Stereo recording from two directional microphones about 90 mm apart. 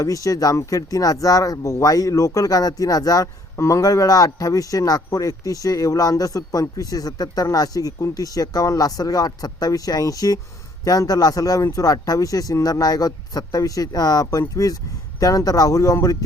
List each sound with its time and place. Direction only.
0.0 s speech: 40° left (ahead or behind)